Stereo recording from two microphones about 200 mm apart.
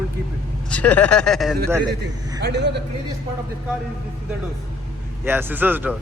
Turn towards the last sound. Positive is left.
turn(degrees=-10)  # may be behind; listen again after turning